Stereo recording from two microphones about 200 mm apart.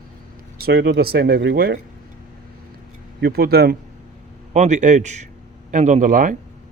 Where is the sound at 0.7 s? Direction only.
65° right (ahead or behind).